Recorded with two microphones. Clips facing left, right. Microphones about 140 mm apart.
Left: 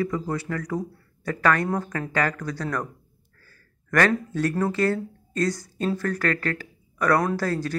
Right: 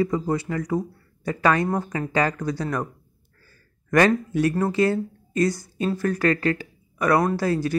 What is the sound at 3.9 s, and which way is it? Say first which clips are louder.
Speech: right 3 dB; 15° right (ahead or behind).